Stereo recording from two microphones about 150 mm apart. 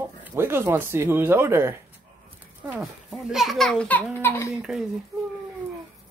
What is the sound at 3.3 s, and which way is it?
A child's voice, centre (ahead or behind).